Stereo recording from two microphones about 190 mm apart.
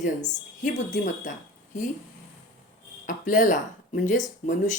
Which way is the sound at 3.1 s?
45° left (ahead or behind).